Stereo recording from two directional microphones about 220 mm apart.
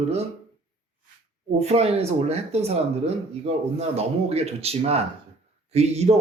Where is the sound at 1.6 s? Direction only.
30° right (ahead or behind).